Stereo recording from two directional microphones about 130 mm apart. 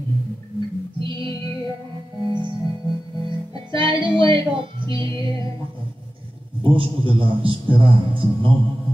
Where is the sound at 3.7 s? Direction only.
40° right (ahead or behind).